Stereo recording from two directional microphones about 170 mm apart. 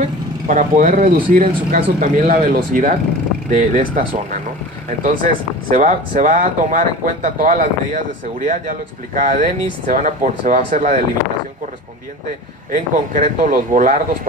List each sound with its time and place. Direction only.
0.5 s speech: 50° right (ahead or behind)
12.7 s speech: 50° right (ahead or behind)